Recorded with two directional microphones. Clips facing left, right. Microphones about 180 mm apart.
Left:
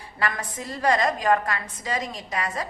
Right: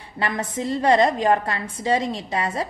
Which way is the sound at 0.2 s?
25° right (ahead or behind).